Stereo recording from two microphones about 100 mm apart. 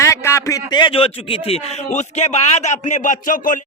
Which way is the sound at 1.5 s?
90° left.